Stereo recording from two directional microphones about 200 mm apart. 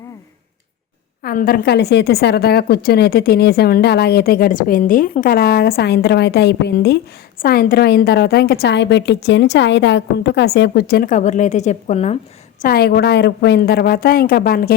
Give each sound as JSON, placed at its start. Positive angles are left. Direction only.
{"t": 1.2, "sound": "a woman's voice", "side_deg": 45}
{"t": 12.6, "sound": "a woman's voice", "side_deg": 50}